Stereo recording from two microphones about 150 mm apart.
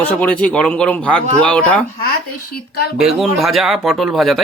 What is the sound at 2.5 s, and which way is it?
Speech, 90° left.